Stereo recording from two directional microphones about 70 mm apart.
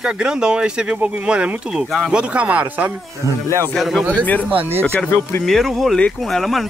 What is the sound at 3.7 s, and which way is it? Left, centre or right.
Speech, centre.